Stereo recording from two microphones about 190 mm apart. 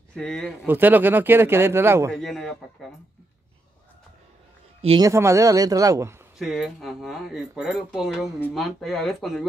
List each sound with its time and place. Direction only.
0.1 s speech: 5° left (ahead or behind)
0.7 s speech: 10° right (ahead or behind)
2.1 s speech: centre (ahead or behind)
4.8 s speech: 25° right (ahead or behind)
5.1 s speech: 15° right (ahead or behind)
6.3 s speech: centre (ahead or behind)